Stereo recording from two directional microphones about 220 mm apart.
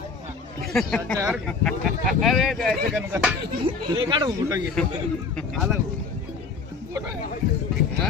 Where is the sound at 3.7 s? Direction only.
25° right (ahead or behind).